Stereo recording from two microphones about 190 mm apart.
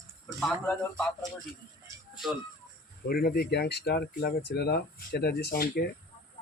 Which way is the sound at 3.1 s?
55° left (ahead or behind).